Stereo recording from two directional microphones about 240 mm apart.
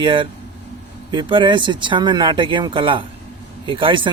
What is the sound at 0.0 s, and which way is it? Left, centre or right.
Speech, centre.